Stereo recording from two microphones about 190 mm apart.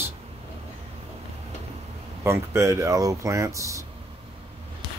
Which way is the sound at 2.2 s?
15° right (ahead or behind).